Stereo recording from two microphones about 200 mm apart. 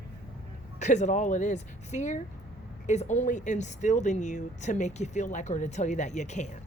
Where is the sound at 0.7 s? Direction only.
35° left (ahead or behind).